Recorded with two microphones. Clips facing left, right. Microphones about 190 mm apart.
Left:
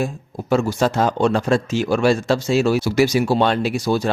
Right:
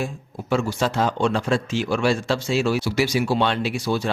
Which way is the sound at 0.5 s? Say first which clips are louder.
Left 4 dB; 40° left (ahead or behind).